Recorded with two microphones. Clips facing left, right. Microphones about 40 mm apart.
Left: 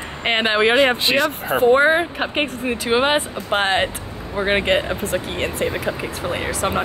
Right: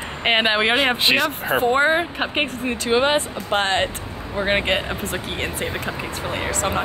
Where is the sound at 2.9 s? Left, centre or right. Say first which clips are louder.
Even; centre.